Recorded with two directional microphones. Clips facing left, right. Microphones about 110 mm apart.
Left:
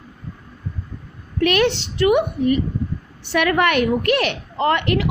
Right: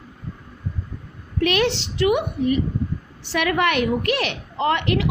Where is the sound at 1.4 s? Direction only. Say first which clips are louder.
Left 3 dB; 55° left (ahead or behind).